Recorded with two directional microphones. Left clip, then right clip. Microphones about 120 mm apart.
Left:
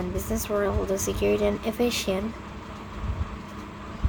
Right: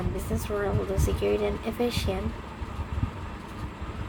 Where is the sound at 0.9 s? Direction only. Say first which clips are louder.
Left 2 dB; 45° left (ahead or behind).